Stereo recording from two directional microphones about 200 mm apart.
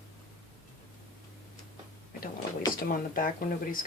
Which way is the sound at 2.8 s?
45° left (ahead or behind).